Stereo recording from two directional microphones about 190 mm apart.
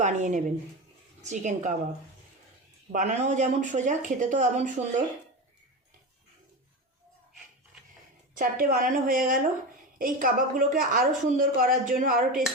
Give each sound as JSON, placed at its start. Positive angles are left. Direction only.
{"t": 0.0, "sound": "speech", "side_deg": -40}
{"t": 2.9, "sound": "speech", "side_deg": -40}
{"t": 8.4, "sound": "a woman's voice", "side_deg": -45}